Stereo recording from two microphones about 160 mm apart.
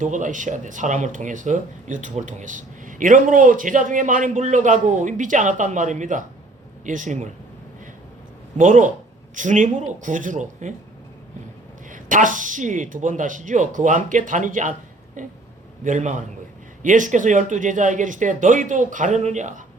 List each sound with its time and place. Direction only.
0.0 s speech: 55° right (ahead or behind)
8.5 s speech: 50° right (ahead or behind)
11.9 s speech: 55° right (ahead or behind)